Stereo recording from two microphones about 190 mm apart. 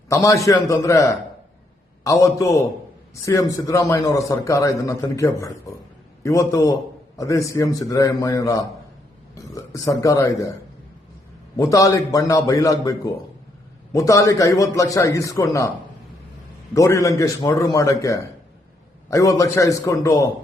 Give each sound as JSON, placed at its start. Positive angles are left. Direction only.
{"t": 0.1, "sound": "a man's voice", "side_deg": 15}
{"t": 11.5, "sound": "a man's voice", "side_deg": 15}
{"t": 16.7, "sound": "a man's voice", "side_deg": 15}